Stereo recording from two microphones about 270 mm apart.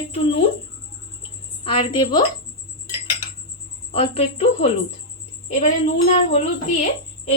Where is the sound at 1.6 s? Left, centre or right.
Centre.